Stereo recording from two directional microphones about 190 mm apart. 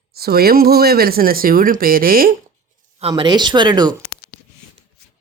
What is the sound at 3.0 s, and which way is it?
Speech, 30° right (ahead or behind).